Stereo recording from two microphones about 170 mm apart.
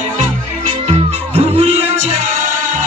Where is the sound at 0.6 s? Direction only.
35° right (ahead or behind).